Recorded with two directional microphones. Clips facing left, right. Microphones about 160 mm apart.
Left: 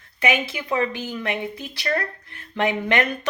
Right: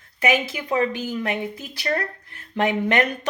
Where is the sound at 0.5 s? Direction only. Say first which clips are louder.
Right 1 dB; 40° right (ahead or behind).